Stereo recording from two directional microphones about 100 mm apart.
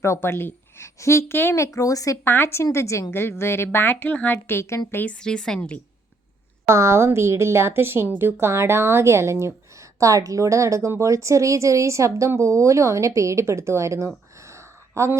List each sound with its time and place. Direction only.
0.0 s a woman's voice: 25° left (ahead or behind)
2.2 s a woman's voice: 20° left (ahead or behind)
5.2 s speech: 5° left (ahead or behind)
6.7 s a woman's voice: 25° right (ahead or behind)
14.4 s a sound: 30° right (ahead or behind)